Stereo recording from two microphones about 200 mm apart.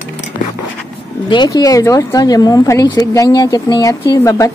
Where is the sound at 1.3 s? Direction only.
20° left (ahead or behind).